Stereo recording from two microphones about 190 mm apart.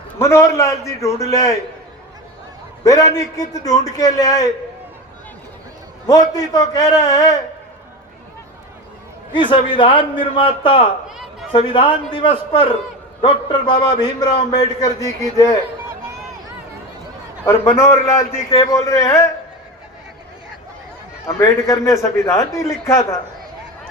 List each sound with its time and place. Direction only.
0.2 s a man's voice: 15° left (ahead or behind)
2.8 s a man's voice: 20° left (ahead or behind)
6.1 s a man's voice: 20° left (ahead or behind)
9.3 s a man's voice: 25° left (ahead or behind)
17.4 s a man's voice: 15° left (ahead or behind)
21.2 s a man's voice: 15° left (ahead or behind)